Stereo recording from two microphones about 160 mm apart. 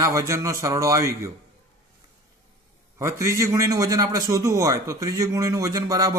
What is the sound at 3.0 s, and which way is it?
A man's voice, 20° right (ahead or behind).